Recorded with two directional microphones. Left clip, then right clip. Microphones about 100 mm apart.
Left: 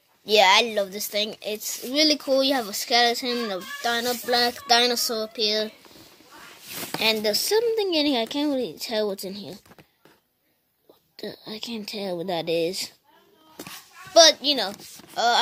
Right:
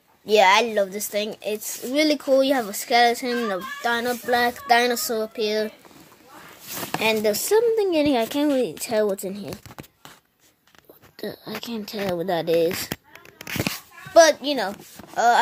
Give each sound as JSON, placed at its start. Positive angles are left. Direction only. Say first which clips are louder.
{"t": 0.3, "sound": "speech", "louder": "right 1 dB", "side_deg": 10}
{"t": 3.8, "sound": "speech", "louder": "right 1 dB", "side_deg": 20}
{"t": 7.0, "sound": "speech", "louder": "right 1 dB", "side_deg": 5}
{"t": 8.7, "sound": "a woman's voice", "louder": "right 4 dB", "side_deg": 5}
{"t": 11.1, "sound": "speech", "louder": "right 3 dB", "side_deg": 35}
{"t": 14.1, "sound": "a woman's voice", "louder": "right 1 dB", "side_deg": 0}